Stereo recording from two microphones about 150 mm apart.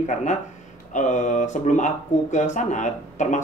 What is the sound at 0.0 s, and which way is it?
Speech, 55° left (ahead or behind).